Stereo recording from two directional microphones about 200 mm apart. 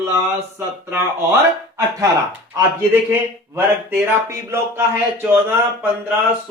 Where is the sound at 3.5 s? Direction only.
10° right (ahead or behind).